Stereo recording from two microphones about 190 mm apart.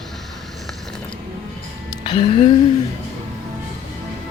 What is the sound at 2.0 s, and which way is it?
Speech, 30° left (ahead or behind).